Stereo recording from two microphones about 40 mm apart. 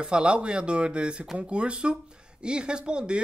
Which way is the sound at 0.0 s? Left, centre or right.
Right.